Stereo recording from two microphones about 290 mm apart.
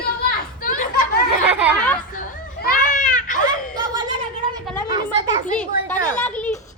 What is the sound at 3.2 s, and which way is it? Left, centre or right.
Baby cry, left.